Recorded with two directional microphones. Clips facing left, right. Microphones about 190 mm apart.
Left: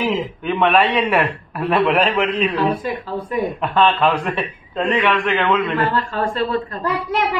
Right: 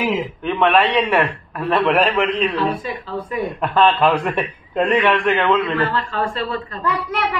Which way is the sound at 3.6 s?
Centre (ahead or behind).